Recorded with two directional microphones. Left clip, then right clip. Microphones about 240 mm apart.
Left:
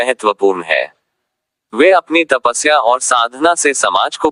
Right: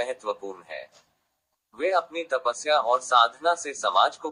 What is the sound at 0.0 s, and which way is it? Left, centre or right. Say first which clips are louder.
Speech: left 17 dB; left.